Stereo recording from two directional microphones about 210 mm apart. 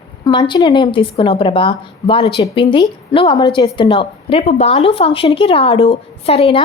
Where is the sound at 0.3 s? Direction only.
25° left (ahead or behind).